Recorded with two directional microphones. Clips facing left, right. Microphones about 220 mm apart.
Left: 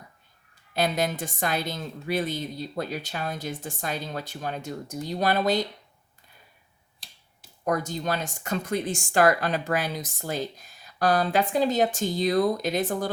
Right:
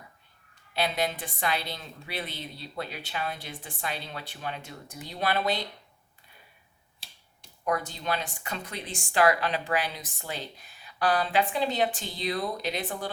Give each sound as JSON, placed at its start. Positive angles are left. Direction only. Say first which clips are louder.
{"t": 0.7, "sound": "a woman's voice", "louder": "left 3 dB", "side_deg": 45}
{"t": 7.6, "sound": "a woman's voice", "louder": "left 3 dB", "side_deg": 45}